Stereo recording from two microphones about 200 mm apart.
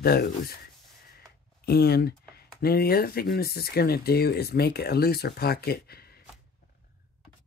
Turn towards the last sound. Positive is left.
turn(degrees=50)  # may be behind; listen again after turning